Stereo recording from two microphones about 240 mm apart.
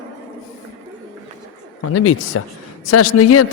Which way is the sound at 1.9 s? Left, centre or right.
Left.